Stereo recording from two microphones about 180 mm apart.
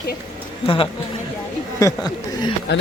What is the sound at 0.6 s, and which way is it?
Speech, 30° left (ahead or behind).